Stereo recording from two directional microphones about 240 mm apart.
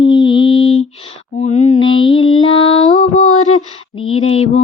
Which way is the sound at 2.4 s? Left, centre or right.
Left.